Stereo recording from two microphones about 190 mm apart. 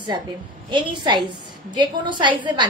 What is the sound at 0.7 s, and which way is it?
A woman's voice, 25° right (ahead or behind).